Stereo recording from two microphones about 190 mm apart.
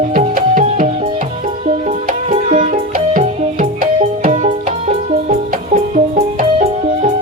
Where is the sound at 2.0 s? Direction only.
35° right (ahead or behind).